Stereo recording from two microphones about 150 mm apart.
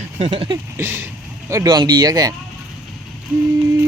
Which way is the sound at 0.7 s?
15° right (ahead or behind).